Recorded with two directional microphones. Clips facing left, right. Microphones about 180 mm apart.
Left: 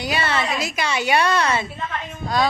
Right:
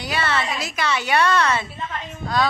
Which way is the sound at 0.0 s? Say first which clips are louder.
Left 1 dB; 15° left (ahead or behind).